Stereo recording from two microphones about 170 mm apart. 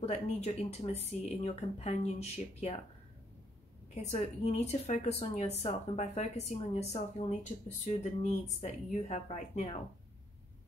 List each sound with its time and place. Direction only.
0.0 s a woman's voice: 40° left (ahead or behind)
3.9 s a woman's voice: 40° left (ahead or behind)